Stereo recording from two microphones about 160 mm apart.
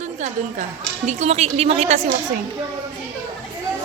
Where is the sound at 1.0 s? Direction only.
45° right (ahead or behind).